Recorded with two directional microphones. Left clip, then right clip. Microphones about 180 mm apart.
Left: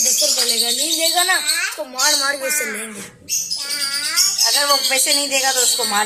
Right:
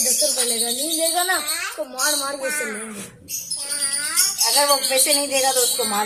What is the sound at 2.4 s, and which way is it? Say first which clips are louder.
Speech: left 3 dB; 40° right (ahead or behind).